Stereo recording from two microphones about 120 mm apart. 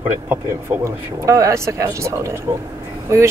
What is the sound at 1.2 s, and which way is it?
Speech, 25° right (ahead or behind).